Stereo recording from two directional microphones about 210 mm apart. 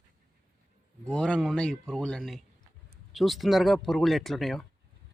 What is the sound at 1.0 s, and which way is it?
Speech, 5° left (ahead or behind).